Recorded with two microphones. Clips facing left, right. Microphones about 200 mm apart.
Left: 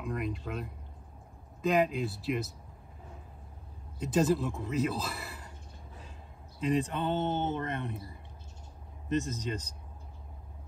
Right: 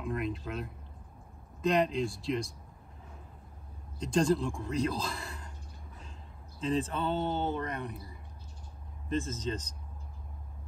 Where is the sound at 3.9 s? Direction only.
5° left (ahead or behind).